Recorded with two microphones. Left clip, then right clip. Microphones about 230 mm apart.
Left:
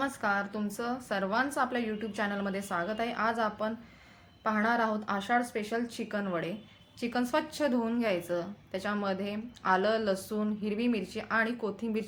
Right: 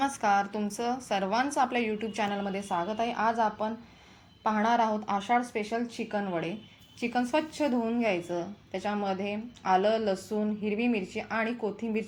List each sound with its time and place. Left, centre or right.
0.0 s a woman's voice: centre
4.4 s a woman's voice: left
5.0 s a woman's voice: centre